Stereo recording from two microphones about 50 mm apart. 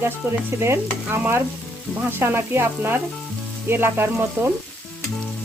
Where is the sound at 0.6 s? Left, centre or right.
Right.